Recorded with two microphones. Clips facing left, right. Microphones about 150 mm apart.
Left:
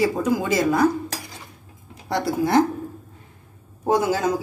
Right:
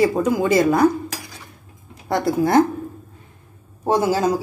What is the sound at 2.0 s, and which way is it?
Speech, 50° right (ahead or behind).